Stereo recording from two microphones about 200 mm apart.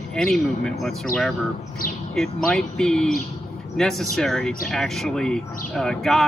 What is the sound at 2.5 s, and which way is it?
Speech, centre (ahead or behind).